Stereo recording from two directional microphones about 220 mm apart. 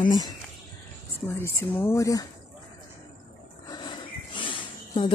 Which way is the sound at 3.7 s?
20° left (ahead or behind).